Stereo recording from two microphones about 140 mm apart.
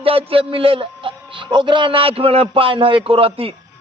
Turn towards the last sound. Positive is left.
turn(degrees=-40)  # may be behind; listen again after turning